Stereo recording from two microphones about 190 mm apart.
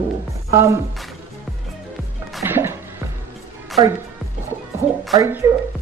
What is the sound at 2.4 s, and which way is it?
Music, 10° right (ahead or behind).